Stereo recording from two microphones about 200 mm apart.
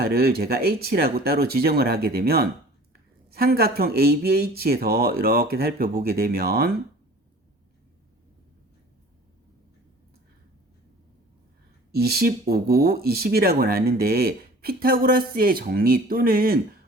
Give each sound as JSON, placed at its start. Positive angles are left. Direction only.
{"t": 0.0, "sound": "speech", "side_deg": -50}
{"t": 11.9, "sound": "speech", "side_deg": -50}